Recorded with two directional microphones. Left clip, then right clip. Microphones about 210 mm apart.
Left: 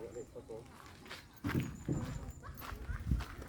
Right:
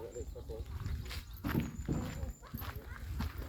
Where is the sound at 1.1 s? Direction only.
25° right (ahead or behind).